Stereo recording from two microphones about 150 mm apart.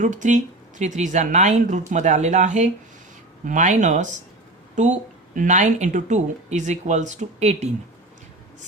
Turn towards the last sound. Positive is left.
turn(degrees=-50)  # may be behind; listen again after turning